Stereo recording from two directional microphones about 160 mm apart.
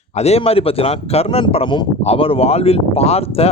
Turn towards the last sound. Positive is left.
turn(degrees=40)  # may be behind; listen again after turning